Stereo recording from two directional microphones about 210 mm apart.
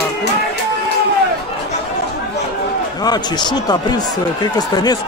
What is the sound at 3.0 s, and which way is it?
Speech, 20° left (ahead or behind).